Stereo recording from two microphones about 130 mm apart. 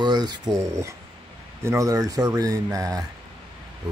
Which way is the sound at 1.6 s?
25° right (ahead or behind).